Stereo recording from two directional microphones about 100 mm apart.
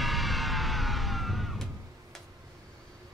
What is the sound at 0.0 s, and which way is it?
Music, centre (ahead or behind).